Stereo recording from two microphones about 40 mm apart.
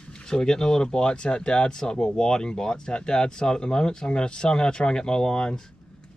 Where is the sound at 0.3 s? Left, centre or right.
Centre.